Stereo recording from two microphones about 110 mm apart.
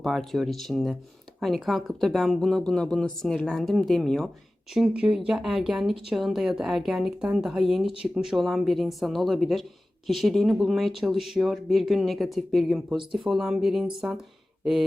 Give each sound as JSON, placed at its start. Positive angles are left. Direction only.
{"t": 0.0, "sound": "speech", "side_deg": 0}
{"t": 13.0, "sound": "speech", "side_deg": -50}
{"t": 13.2, "sound": "speech", "side_deg": 0}
{"t": 14.6, "sound": "a sound", "side_deg": -5}